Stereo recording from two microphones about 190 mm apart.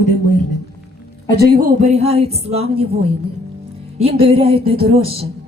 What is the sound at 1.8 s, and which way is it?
Speech, 35° right (ahead or behind).